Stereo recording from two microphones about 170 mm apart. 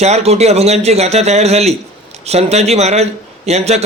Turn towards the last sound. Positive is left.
turn(degrees=-40)  # may be behind; listen again after turning